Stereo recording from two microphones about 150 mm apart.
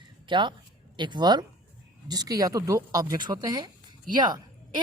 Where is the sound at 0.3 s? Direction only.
30° right (ahead or behind).